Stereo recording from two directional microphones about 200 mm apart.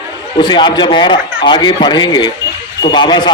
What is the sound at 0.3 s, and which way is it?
Speech, 25° left (ahead or behind).